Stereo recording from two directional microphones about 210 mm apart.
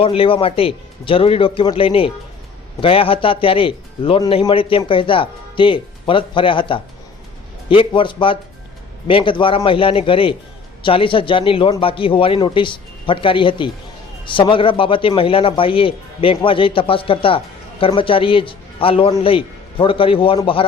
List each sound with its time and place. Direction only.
0.0 s a man's voice: 25° left (ahead or behind)